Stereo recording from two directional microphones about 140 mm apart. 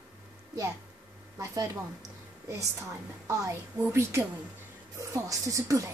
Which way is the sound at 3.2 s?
20° right (ahead or behind).